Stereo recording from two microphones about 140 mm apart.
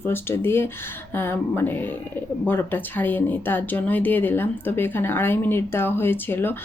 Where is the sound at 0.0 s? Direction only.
15° left (ahead or behind).